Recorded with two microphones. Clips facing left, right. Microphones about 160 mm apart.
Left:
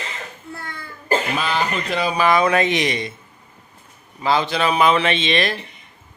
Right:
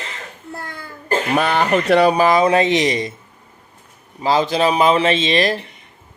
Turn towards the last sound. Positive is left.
turn(degrees=-35)  # may be behind; listen again after turning